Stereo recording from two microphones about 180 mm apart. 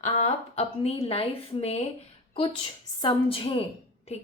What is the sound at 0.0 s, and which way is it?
A woman's voice, 40° left (ahead or behind).